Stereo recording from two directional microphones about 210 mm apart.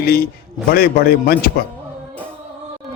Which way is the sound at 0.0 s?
50° left (ahead or behind).